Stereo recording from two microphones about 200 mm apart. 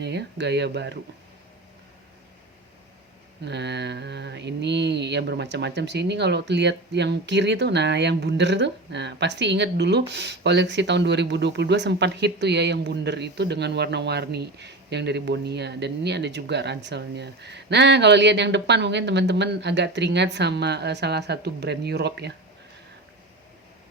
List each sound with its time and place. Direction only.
0.0 s mantra: 60° right (ahead or behind)
3.4 s mantra: 60° right (ahead or behind)